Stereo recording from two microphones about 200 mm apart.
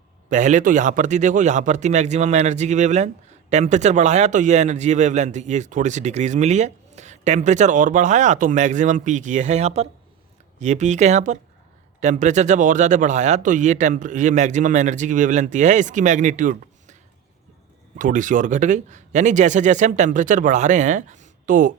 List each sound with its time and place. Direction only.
0.3 s speech: 40° right (ahead or behind)